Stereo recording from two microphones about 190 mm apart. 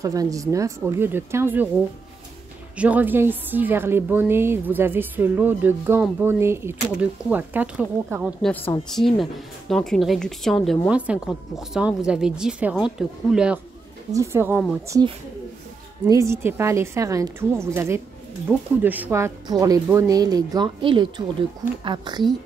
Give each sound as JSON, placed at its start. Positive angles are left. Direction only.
{"t": 0.0, "sound": "a woman's voice", "side_deg": -15}
{"t": 2.8, "sound": "a woman's voice", "side_deg": -10}